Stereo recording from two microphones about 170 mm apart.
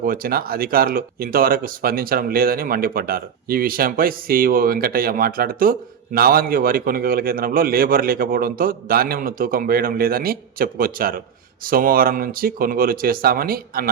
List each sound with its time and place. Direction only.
0.0 s speech: 55° right (ahead or behind)